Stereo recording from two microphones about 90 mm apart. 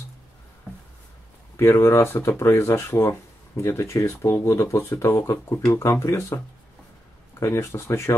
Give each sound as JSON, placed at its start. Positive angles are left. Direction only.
{"t": 1.6, "sound": "speech", "side_deg": 30}